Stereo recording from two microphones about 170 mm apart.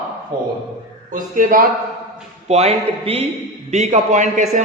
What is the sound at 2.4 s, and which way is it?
A man's voice, 40° right (ahead or behind).